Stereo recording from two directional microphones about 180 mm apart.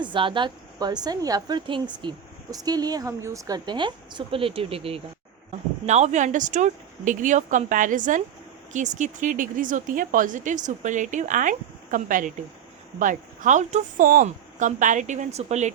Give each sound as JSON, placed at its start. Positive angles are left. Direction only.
{"t": 0.0, "sound": "a woman's voice", "side_deg": -25}